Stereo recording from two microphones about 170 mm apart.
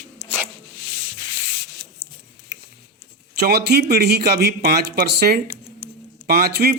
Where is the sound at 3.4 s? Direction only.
65° right (ahead or behind).